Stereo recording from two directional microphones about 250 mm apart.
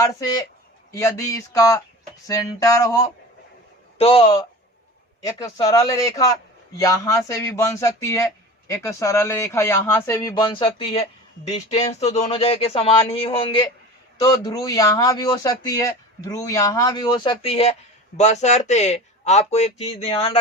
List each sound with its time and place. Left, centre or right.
0.0 s speech: centre
5.7 s speech: centre